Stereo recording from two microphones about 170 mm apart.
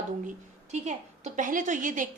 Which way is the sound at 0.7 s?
45° right (ahead or behind).